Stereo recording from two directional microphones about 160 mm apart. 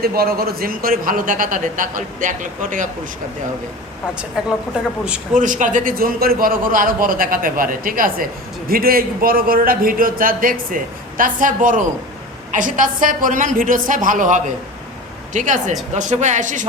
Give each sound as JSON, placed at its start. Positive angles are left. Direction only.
{"t": 0.0, "sound": "a man's voice", "side_deg": -75}
{"t": 4.4, "sound": "speech", "side_deg": -5}
{"t": 5.3, "sound": "a man's voice", "side_deg": -55}